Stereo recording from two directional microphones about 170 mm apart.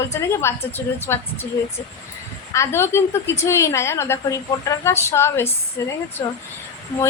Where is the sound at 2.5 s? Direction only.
15° left (ahead or behind).